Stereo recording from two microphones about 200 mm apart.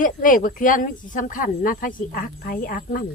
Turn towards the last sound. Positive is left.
turn(degrees=45)  # may be behind; listen again after turning